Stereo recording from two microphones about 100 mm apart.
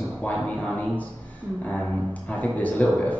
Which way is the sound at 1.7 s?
15° left (ahead or behind).